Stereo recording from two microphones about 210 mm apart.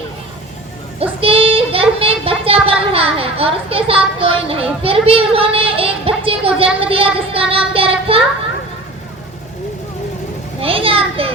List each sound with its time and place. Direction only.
0.9 s child singing: 25° right (ahead or behind)
2.9 s speech: 25° right (ahead or behind)
6.8 s a sound: 25° right (ahead or behind)
10.6 s children playing: 25° right (ahead or behind)